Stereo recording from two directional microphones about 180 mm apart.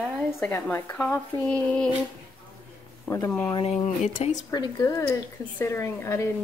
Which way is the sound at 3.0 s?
15° left (ahead or behind).